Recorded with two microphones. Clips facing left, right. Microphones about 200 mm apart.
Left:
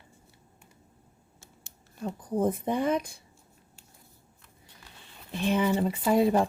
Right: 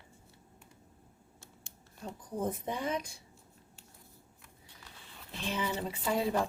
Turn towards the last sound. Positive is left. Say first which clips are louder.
# left 8 dB
turn(degrees=55)  # may be behind; listen again after turning